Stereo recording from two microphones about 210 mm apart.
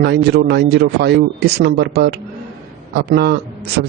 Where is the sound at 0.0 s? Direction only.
50° right (ahead or behind).